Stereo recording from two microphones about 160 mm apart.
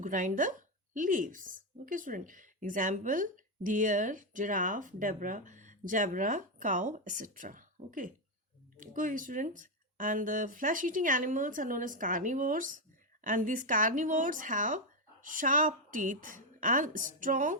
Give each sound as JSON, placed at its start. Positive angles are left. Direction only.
{"t": 0.0, "sound": "speech", "side_deg": -55}